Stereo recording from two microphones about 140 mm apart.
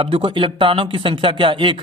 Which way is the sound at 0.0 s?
40° right (ahead or behind).